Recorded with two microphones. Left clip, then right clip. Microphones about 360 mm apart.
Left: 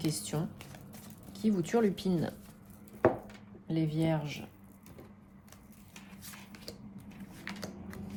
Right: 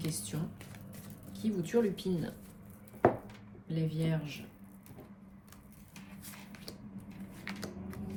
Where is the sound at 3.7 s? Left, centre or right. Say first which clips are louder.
Left 5 dB; left.